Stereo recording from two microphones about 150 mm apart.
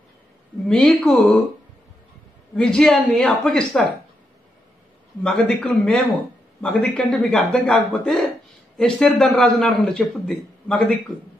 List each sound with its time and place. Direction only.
0.7 s a man's voice: 5° left (ahead or behind)
2.5 s a man's voice: 5° left (ahead or behind)
5.2 s a man's voice: 5° left (ahead or behind)